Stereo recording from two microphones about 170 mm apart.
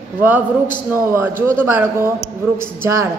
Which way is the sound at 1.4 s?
15° right (ahead or behind).